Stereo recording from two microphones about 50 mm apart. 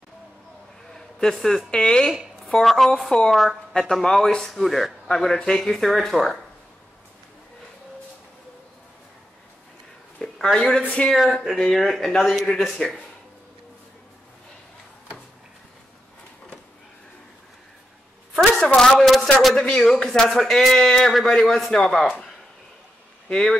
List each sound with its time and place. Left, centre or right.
1.3 s speech: centre
2.4 s speech: centre
5.0 s speech: centre
10.5 s speech: centre
11.1 s speech: centre
18.4 s a sound: left
18.8 s speech: centre
23.3 s speech: centre